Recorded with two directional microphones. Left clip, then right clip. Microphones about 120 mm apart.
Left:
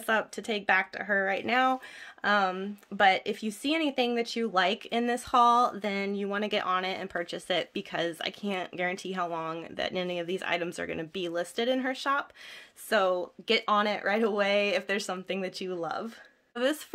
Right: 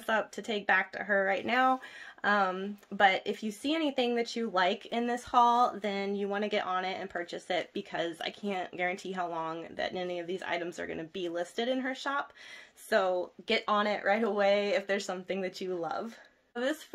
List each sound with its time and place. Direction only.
0.0 s speech: 30° left (ahead or behind)